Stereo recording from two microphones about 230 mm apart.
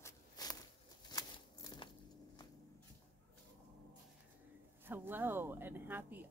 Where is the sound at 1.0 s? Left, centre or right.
Centre.